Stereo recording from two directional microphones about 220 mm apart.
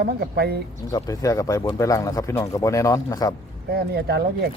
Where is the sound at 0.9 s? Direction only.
15° left (ahead or behind).